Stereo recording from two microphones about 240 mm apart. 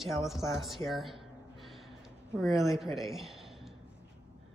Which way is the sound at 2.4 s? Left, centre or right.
Centre.